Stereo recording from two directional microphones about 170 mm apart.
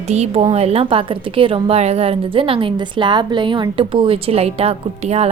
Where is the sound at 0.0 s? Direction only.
40° right (ahead or behind).